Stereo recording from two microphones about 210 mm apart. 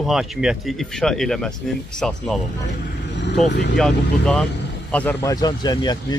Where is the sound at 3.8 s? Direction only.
5° left (ahead or behind).